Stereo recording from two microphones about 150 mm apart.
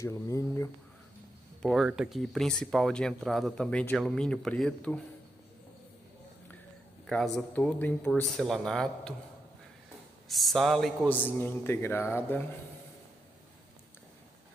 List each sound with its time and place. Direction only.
0.0 s speech: 20° left (ahead or behind)
1.6 s speech: centre (ahead or behind)
7.6 s speech: 10° left (ahead or behind)
10.2 s speech: centre (ahead or behind)
11.1 s a man's voice: 10° left (ahead or behind)